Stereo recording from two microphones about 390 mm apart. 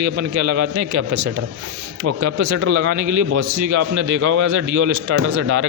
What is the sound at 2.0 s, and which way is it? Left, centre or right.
A man's voice, right.